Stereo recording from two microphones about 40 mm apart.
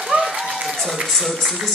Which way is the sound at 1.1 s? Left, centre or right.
Centre.